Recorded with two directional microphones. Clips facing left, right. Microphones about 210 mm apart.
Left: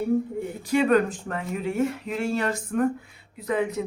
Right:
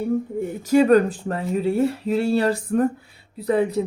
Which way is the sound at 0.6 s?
40° right (ahead or behind).